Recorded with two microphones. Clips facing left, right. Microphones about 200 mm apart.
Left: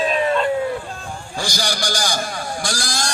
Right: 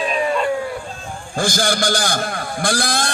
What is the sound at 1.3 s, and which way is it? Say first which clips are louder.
A man's voice: right 6 dB; 50° right (ahead or behind).